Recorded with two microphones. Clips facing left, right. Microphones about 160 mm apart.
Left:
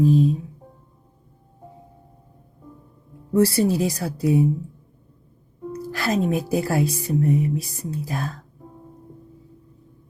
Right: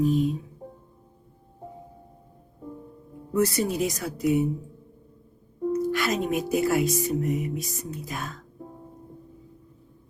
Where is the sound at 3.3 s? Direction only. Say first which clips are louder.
Left 5 dB; 30° left (ahead or behind).